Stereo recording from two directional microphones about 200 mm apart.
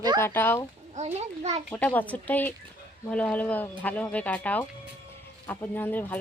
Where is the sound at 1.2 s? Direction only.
30° right (ahead or behind).